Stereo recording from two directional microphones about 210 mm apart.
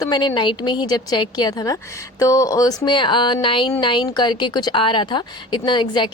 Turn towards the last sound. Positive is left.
turn(degrees=20)  # may be behind; listen again after turning